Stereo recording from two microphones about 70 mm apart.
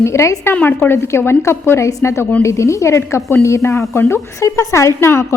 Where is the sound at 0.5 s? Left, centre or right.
Left.